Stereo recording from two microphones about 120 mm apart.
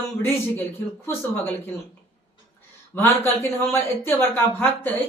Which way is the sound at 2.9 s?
20° left (ahead or behind).